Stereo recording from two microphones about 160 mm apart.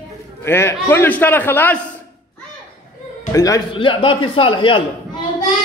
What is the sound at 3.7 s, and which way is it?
A man's voice, 30° left (ahead or behind).